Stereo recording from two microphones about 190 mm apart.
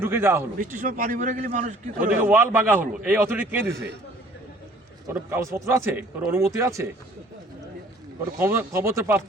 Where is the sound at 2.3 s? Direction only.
10° right (ahead or behind).